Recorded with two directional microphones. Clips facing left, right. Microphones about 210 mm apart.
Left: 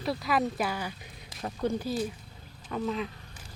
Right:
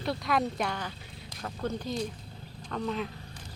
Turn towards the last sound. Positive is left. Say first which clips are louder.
# left 1 dB
turn(degrees=0)  # may be behind; listen again after turning